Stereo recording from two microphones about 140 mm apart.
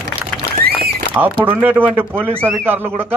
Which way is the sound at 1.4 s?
15° right (ahead or behind).